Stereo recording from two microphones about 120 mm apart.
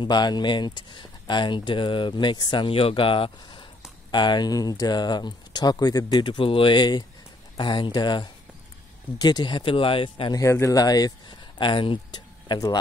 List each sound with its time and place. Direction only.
0.0 s speech: 35° left (ahead or behind)
10.3 s speech: 25° left (ahead or behind)